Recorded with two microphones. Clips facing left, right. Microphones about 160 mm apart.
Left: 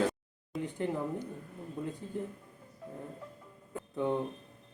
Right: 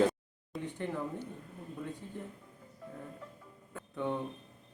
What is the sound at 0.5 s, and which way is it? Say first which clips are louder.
Speech: left 3 dB; centre (ahead or behind).